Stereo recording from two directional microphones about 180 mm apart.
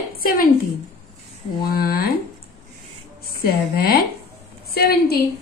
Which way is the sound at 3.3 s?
55° left (ahead or behind).